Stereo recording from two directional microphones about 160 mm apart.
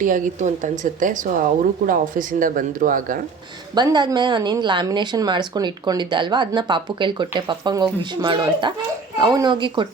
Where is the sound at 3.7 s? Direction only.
25° right (ahead or behind).